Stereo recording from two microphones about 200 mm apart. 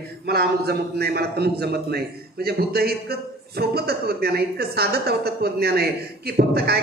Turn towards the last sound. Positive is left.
turn(degrees=-50)  # may be behind; listen again after turning